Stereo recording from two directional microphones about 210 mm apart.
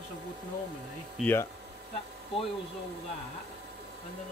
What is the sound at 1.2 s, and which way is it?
Speech, 10° left (ahead or behind).